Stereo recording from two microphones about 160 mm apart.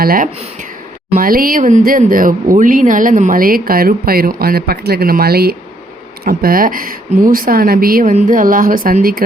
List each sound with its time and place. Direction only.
0.0 s speech: 65° right (ahead or behind)
6.2 s speech: 65° right (ahead or behind)